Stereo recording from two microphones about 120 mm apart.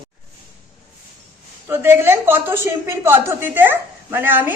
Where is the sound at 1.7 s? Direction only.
20° right (ahead or behind).